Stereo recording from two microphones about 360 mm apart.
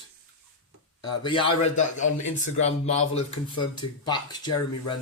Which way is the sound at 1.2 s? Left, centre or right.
Centre.